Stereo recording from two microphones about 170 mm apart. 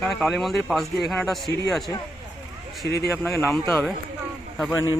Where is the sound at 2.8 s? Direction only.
75° left (ahead or behind).